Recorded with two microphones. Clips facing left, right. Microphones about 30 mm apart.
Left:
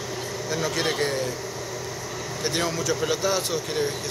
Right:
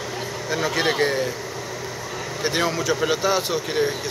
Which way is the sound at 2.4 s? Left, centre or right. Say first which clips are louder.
Right 4 dB; centre.